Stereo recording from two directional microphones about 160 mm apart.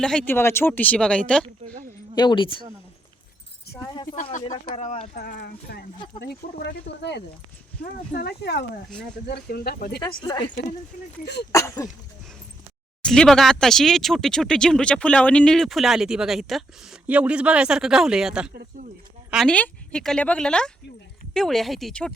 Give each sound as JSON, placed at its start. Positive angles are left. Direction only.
{"t": 0.0, "sound": "speech", "side_deg": 5}
{"t": 1.7, "sound": "a sound", "side_deg": -60}
{"t": 2.1, "sound": "speech", "side_deg": 30}
{"t": 3.8, "sound": "a sound", "side_deg": 20}
{"t": 4.1, "sound": "a sound", "side_deg": 55}
{"t": 4.6, "sound": "speech", "side_deg": 45}
{"t": 5.1, "sound": "speech", "side_deg": 80}
{"t": 10.0, "sound": "speech", "side_deg": 25}
{"t": 10.9, "sound": "speech", "side_deg": 55}
{"t": 11.5, "sound": "speech", "side_deg": 20}
{"t": 13.0, "sound": "a woman's voice", "side_deg": 5}